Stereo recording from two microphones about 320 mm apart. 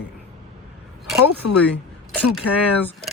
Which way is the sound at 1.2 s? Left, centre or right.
Left.